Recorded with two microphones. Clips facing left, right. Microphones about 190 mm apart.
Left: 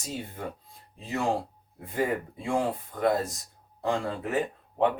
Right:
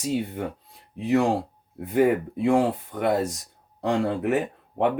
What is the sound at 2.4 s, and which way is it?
Speech, 70° right (ahead or behind).